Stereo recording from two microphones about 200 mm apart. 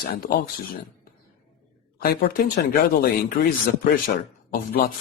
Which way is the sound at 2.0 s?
50° left (ahead or behind).